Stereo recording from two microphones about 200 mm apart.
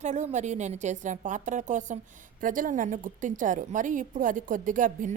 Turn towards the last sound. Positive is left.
turn(degrees=-40)  # may be behind; listen again after turning